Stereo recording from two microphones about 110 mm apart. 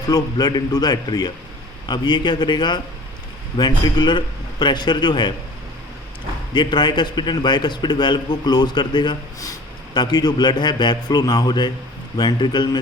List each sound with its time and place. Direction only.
0.1 s a man's voice: 40° left (ahead or behind)
6.5 s a man's voice: 40° left (ahead or behind)